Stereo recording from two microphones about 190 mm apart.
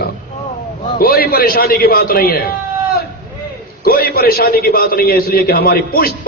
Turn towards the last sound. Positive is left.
turn(degrees=50)  # may be behind; listen again after turning